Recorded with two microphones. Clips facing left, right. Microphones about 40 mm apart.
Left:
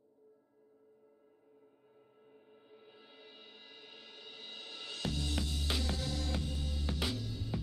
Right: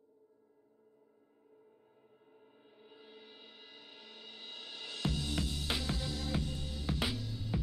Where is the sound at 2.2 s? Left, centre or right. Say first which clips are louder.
Left 2 dB; centre.